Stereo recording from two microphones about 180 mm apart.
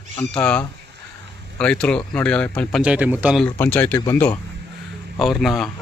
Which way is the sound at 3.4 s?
10° left (ahead or behind).